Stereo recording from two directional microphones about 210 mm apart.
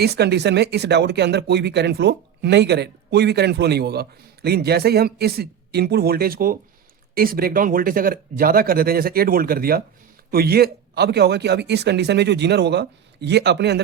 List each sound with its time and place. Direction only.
0.0 s speech: 50° right (ahead or behind)